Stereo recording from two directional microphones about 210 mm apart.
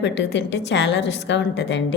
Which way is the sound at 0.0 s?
55° left (ahead or behind).